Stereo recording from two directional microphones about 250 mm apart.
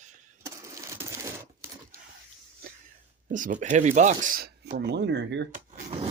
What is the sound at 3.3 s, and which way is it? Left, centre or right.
Speech, right.